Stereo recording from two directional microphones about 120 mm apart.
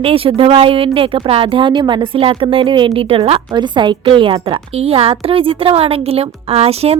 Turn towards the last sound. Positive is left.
turn(degrees=-60)  # may be behind; listen again after turning